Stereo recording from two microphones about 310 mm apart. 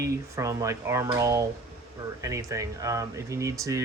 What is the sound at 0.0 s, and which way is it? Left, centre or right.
Speech, centre.